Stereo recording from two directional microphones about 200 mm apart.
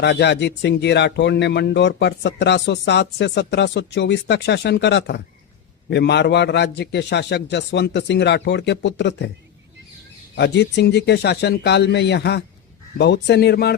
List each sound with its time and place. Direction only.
0.0 s speech: 55° left (ahead or behind)
10.3 s speech: 55° left (ahead or behind)